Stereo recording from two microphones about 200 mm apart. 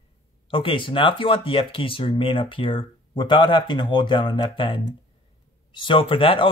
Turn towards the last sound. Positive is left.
turn(degrees=25)  # may be behind; listen again after turning